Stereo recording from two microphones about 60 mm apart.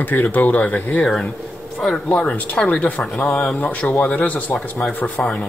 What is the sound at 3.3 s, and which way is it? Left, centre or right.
Speech, centre.